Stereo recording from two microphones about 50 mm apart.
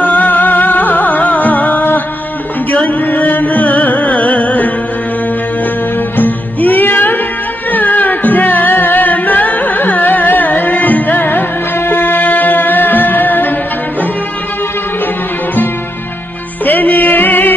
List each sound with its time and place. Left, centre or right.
0.0 s music: left
6.1 s music: left
16.6 s music: left